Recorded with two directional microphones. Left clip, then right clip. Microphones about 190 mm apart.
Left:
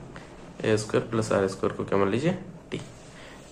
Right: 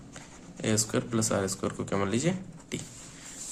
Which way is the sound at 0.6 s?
30° right (ahead or behind).